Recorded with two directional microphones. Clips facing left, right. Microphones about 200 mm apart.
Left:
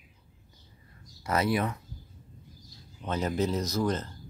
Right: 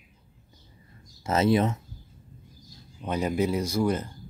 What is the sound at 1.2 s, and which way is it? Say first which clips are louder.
Speech: right 5 dB; 25° right (ahead or behind).